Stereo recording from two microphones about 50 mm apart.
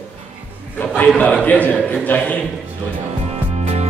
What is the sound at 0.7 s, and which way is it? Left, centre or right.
A man's voice, left.